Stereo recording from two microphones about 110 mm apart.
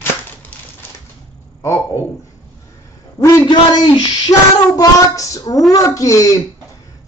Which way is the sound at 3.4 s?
45° left (ahead or behind).